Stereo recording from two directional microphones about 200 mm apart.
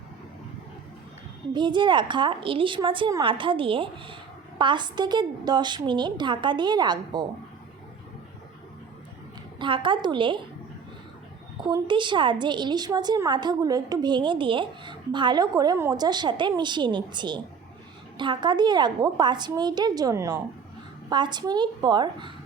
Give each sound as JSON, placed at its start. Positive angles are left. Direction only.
{"t": 1.5, "sound": "a woman's voice", "side_deg": -20}
{"t": 9.6, "sound": "a woman's voice", "side_deg": -25}
{"t": 11.7, "sound": "a woman's voice", "side_deg": -25}